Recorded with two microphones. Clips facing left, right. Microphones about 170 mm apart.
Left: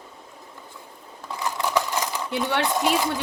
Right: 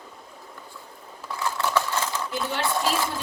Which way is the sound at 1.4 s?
15° left (ahead or behind).